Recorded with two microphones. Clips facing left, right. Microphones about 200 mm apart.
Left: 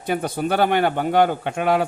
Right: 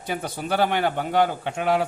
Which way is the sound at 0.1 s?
55° left (ahead or behind).